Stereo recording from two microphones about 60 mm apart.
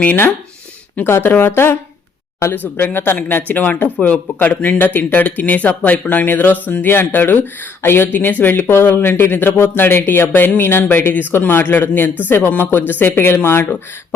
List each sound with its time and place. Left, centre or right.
0.0 s speech: left